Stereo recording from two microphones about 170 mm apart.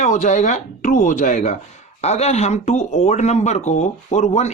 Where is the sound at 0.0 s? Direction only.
45° left (ahead or behind).